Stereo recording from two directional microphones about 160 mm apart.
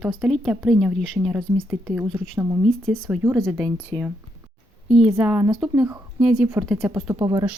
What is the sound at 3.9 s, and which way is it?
Speech, 30° right (ahead or behind).